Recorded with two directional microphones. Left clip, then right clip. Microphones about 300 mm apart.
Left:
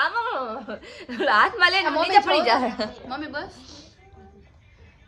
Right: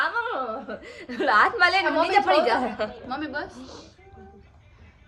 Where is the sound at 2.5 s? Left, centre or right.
Centre.